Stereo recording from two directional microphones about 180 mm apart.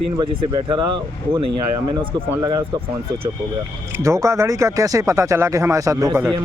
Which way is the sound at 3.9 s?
15° right (ahead or behind).